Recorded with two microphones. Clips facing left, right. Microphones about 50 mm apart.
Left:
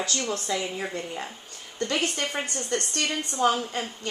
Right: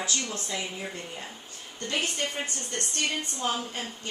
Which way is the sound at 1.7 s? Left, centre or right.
Left.